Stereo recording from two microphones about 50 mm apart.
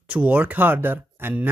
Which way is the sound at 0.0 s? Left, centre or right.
Right.